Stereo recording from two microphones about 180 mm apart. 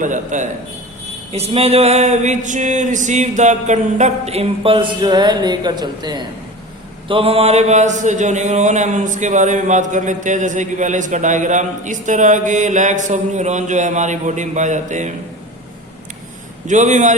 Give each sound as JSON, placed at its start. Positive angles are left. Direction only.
{"t": 0.0, "sound": "speech", "side_deg": -45}
{"t": 1.3, "sound": "a sound", "side_deg": -35}
{"t": 7.1, "sound": "speech", "side_deg": -30}
{"t": 16.6, "sound": "speech", "side_deg": -45}